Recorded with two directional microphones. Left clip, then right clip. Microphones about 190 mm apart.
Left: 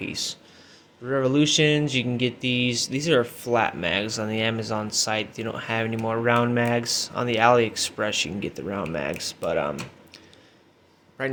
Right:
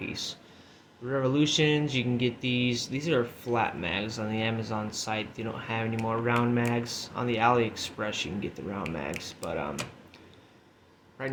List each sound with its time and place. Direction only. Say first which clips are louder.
0.0 s speech: left 5 dB; 40° left (ahead or behind)
11.2 s a man's voice: left 7 dB; 45° left (ahead or behind)